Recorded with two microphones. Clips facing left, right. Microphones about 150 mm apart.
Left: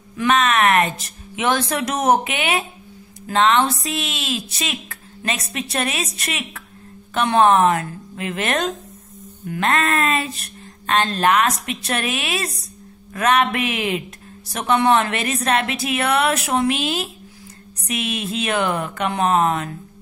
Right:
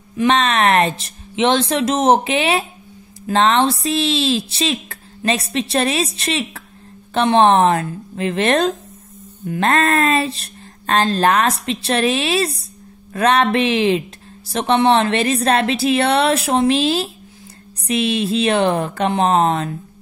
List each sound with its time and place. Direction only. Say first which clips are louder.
0.2 s speech: right 2 dB; 30° right (ahead or behind)